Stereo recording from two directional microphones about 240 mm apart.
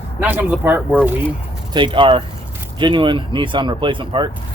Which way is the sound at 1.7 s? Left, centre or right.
Centre.